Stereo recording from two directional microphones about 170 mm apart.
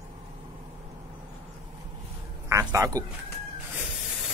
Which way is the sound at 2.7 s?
20° right (ahead or behind).